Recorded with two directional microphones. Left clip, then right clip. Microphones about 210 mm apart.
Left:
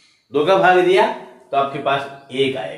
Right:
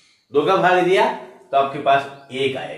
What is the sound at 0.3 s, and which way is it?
Speech, 35° left (ahead or behind).